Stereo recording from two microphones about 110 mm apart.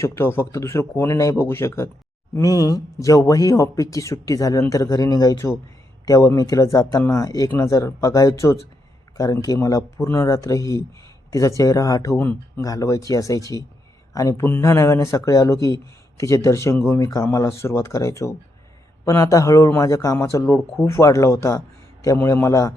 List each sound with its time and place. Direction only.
0.0 s speech: 25° left (ahead or behind)